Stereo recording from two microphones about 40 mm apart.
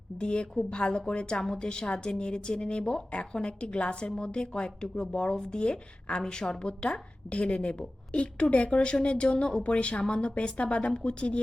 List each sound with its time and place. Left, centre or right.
0.2 s a woman's voice: left